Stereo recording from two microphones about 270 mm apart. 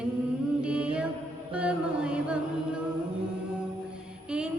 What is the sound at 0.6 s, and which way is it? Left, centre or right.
Mantra, centre.